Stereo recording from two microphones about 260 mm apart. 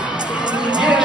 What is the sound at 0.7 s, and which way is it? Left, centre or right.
Crowd, centre.